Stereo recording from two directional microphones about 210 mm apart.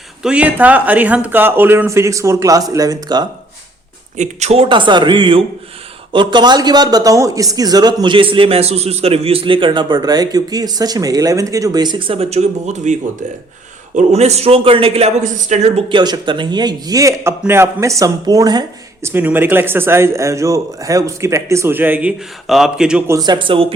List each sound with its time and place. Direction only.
0.2 s speech: 5° right (ahead or behind)
4.2 s speech: 35° right (ahead or behind)